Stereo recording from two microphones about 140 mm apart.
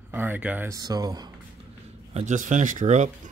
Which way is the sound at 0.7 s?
30° right (ahead or behind).